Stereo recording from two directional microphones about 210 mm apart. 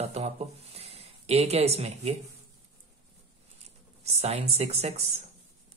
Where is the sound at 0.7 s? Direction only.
30° right (ahead or behind).